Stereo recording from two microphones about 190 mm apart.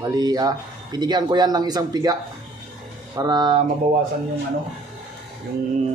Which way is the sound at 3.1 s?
20° right (ahead or behind).